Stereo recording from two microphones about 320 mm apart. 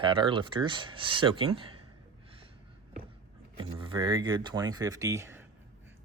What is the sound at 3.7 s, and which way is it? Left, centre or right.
Speech, centre.